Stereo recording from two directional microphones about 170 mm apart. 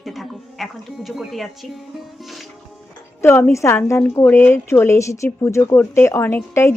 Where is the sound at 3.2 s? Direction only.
15° left (ahead or behind).